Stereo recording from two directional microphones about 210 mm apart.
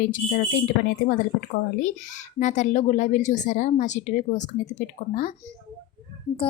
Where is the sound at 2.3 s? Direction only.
35° left (ahead or behind).